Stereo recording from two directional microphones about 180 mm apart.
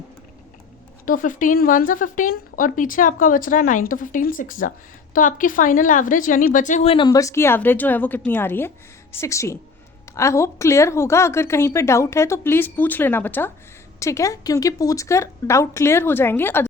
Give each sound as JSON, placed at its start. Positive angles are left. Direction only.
{"t": 1.0, "sound": "a woman's voice", "side_deg": 45}
{"t": 6.9, "sound": "a woman's voice", "side_deg": 25}